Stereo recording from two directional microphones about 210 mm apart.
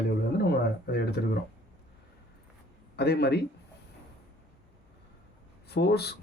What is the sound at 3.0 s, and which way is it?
Speech, 50° left (ahead or behind).